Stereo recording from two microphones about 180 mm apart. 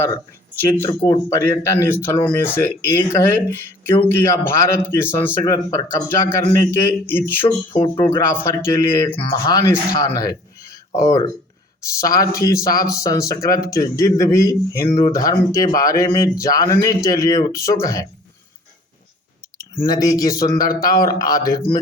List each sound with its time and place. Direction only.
0.6 s speech: 15° left (ahead or behind)
0.9 s speech: 25° left (ahead or behind)
7.4 s speech: 30° left (ahead or behind)
19.9 s speech: 20° left (ahead or behind)